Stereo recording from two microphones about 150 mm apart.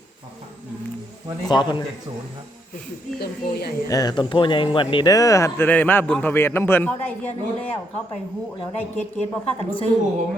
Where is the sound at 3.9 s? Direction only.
25° left (ahead or behind).